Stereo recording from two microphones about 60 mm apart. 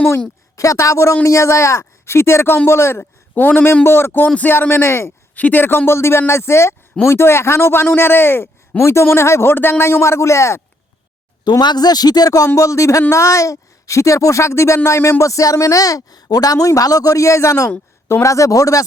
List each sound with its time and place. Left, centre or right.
0.5 s speech: left
3.3 s a man's voice: left
5.3 s a man's voice: left
8.8 s speech: left
11.5 s speech: left
12.5 s speech: left
15.2 s speech: left